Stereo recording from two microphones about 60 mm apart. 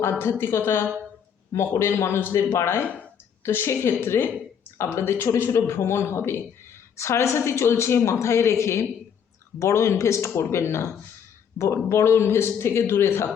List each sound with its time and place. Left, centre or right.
0.0 s a woman's voice: left
2.8 s speech: left
3.4 s a woman's voice: left